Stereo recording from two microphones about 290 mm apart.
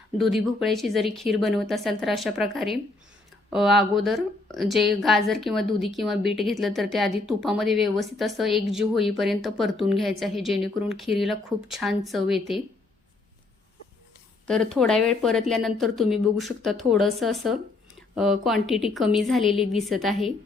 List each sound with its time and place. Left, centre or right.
0.2 s a woman's voice: centre
14.4 s a woman's voice: centre